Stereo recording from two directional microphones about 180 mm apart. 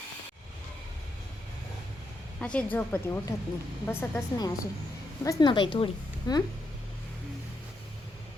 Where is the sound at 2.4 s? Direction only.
5° left (ahead or behind); by 6.4 s 25° left (ahead or behind).